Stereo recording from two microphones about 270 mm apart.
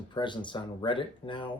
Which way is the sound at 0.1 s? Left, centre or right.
Centre.